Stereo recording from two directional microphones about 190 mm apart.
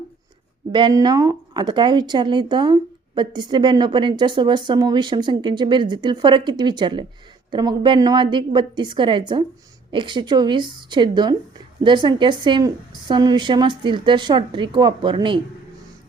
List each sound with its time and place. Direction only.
0.7 s a woman's voice: 25° right (ahead or behind)